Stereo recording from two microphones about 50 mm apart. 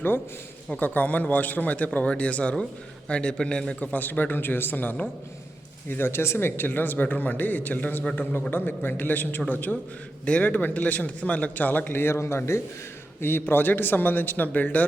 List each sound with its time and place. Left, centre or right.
0.8 s a man's voice: left; by 3.8 s centre
3.8 s speech: left
5.9 s speech: left
11.9 s a man's voice: left
12.1 s speech: left
13.2 s a man's voice: left